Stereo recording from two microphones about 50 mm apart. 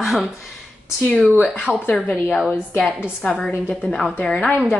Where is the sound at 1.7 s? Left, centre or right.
Centre.